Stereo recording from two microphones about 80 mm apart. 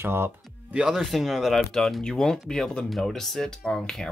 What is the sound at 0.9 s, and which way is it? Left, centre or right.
Speech, centre.